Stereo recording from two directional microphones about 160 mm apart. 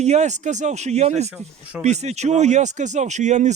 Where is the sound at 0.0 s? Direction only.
45° right (ahead or behind).